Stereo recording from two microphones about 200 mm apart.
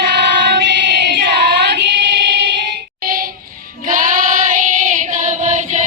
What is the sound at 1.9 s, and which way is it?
Music, 60° right (ahead or behind).